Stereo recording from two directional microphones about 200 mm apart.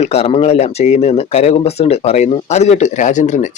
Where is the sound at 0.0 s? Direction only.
30° left (ahead or behind).